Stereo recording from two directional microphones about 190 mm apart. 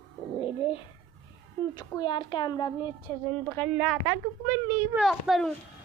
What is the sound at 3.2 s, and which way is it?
A woman's voice, 5° left (ahead or behind).